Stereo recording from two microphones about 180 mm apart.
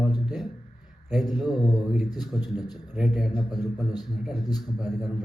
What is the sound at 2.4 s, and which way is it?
Speech, 20° left (ahead or behind).